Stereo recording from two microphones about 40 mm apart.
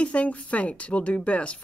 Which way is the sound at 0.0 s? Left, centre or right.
Left.